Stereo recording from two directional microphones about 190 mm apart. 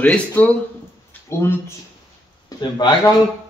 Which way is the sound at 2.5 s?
20° left (ahead or behind).